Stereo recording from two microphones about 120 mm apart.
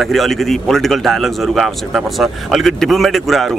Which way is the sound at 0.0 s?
Centre (ahead or behind).